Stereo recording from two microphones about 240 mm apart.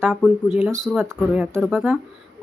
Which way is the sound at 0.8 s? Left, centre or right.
Centre.